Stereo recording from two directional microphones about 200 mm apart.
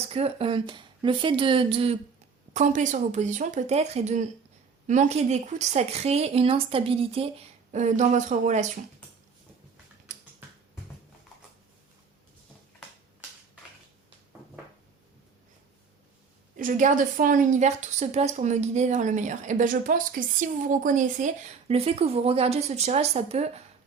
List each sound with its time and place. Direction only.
0.1 s a woman's voice: 30° right (ahead or behind)
16.6 s a woman's voice: 40° right (ahead or behind)